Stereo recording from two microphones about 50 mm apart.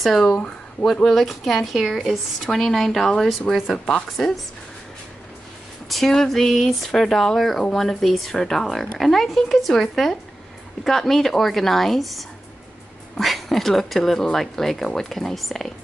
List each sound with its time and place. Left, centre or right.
0.0 s a woman's voice: centre
0.3 s speech: left
1.0 s a woman's voice: centre
5.9 s a woman's voice: centre